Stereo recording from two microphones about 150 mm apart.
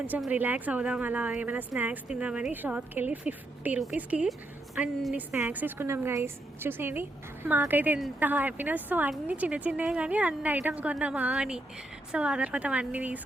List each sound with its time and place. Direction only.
0.2 s a woman's voice: 10° right (ahead or behind)